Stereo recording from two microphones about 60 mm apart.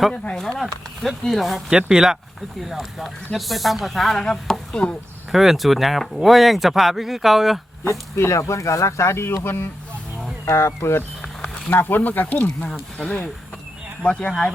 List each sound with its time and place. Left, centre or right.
0.1 s speech: centre
1.7 s speech: centre
2.6 s speech: centre
5.3 s speech: centre
7.9 s speech: left
10.4 s speech: left
11.7 s speech: left
14.0 s speech: centre